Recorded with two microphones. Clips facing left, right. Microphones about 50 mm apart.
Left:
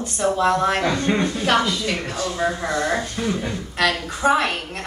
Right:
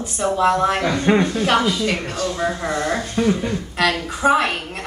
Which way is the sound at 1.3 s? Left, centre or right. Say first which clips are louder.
Right 2 dB; centre.